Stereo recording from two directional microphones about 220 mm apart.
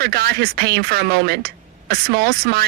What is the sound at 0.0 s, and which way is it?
Speech, 45° right (ahead or behind).